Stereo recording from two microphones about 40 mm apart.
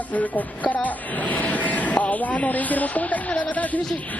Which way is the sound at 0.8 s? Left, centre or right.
Left.